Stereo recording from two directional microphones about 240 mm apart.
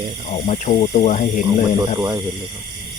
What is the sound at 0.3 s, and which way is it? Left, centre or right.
Speech, left.